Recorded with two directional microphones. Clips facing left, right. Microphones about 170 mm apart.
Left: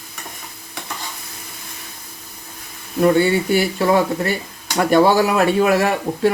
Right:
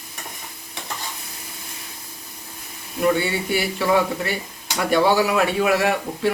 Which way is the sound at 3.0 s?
45° left (ahead or behind).